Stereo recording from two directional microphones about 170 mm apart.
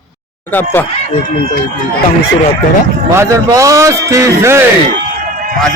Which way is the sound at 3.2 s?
20° right (ahead or behind).